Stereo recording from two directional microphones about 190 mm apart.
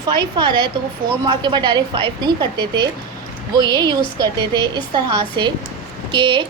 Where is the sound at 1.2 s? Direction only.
20° right (ahead or behind).